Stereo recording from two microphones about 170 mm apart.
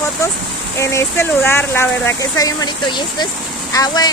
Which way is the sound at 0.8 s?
15° left (ahead or behind).